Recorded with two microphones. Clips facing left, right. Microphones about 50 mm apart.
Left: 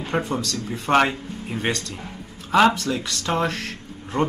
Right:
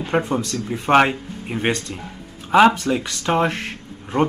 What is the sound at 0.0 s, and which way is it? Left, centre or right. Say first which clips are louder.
Speech: right 4 dB; right.